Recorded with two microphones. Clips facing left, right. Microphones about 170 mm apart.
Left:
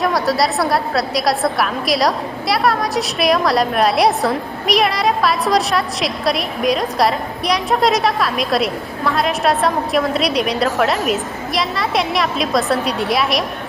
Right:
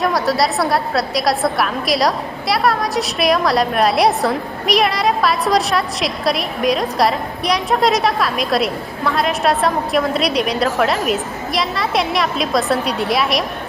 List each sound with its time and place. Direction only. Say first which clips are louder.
0.0 s a woman's voice: even; centre (ahead or behind)